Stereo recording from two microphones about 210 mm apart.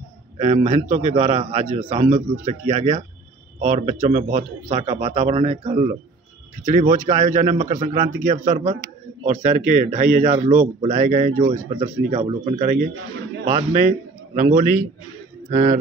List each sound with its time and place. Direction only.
0.4 s speech: 30° right (ahead or behind)